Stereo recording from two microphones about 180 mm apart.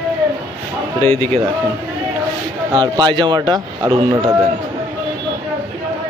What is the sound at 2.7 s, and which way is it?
A man's voice, 25° right (ahead or behind).